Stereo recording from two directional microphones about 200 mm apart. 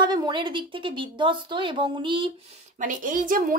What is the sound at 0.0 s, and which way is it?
Speech, 20° right (ahead or behind).